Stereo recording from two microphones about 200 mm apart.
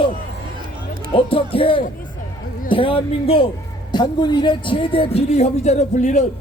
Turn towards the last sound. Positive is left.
turn(degrees=35)  # may be behind; listen again after turning